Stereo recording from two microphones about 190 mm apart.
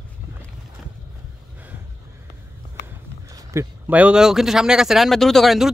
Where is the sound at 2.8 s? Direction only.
15° right (ahead or behind).